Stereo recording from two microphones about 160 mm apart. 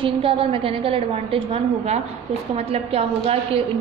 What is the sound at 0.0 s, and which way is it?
A woman's voice, 35° right (ahead or behind).